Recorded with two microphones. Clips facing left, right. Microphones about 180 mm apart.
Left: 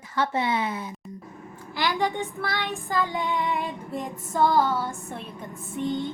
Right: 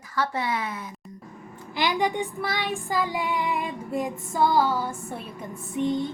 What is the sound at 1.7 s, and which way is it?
Child singing, 20° right (ahead or behind).